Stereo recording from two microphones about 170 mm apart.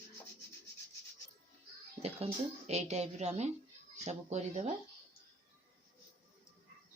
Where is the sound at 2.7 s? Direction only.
40° right (ahead or behind).